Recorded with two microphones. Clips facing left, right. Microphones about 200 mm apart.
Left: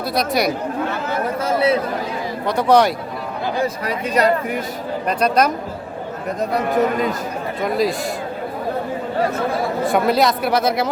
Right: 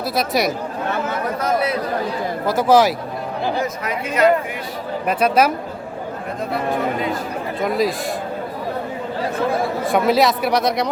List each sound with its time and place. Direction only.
0.1 s speech: centre (ahead or behind)
1.4 s a sound: 25° left (ahead or behind)
2.5 s speech: centre (ahead or behind)
3.6 s speech: 35° left (ahead or behind)
5.0 s speech: 5° right (ahead or behind)
7.6 s speech: centre (ahead or behind)
9.8 s speech: centre (ahead or behind)